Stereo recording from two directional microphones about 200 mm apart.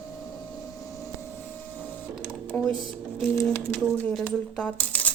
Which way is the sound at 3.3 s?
10° left (ahead or behind).